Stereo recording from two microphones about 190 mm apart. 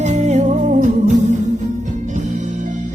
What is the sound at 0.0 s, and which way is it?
Music, 35° right (ahead or behind).